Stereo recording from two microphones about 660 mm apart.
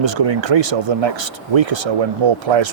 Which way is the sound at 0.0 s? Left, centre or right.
Right.